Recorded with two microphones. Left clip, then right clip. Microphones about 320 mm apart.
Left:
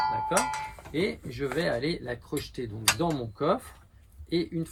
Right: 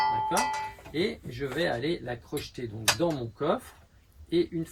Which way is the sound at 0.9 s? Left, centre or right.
Centre.